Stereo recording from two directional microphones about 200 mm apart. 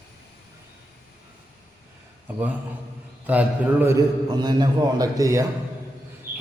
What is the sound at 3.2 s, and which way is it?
A man's voice, 10° right (ahead or behind).